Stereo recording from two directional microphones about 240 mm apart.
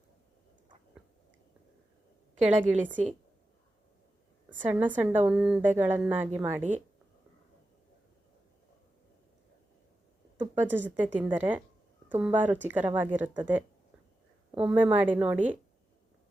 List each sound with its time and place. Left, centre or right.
2.6 s a woman's voice: centre
4.7 s a woman's voice: centre
6.6 s speech: right
10.4 s a woman's voice: centre